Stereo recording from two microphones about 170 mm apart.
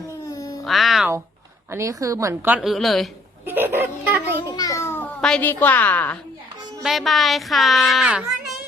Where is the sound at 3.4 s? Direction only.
10° right (ahead or behind).